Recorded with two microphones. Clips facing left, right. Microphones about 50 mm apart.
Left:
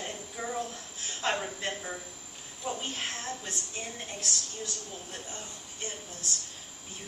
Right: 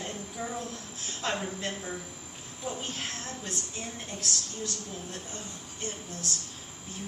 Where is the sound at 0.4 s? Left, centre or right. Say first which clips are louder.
Left 1 dB; centre.